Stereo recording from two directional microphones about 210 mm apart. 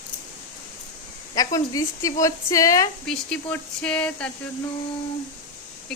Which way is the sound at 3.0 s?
5° left (ahead or behind).